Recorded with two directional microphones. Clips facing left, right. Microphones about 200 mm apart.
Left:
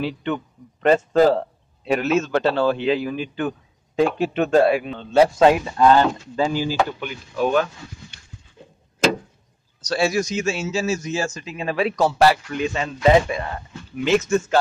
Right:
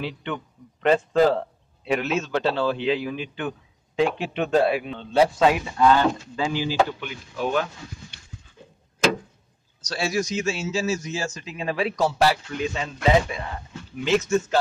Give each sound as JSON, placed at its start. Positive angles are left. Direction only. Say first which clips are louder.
{"t": 0.0, "sound": "a man's voice", "louder": "left 5 dB", "side_deg": 40}
{"t": 9.8, "sound": "a man's voice", "louder": "left 5 dB", "side_deg": 55}
{"t": 14.0, "sound": "speech", "louder": "left 2 dB", "side_deg": 80}